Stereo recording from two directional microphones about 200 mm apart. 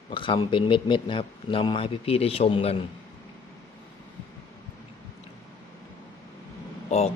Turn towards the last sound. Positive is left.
turn(degrees=30)  # may be behind; listen again after turning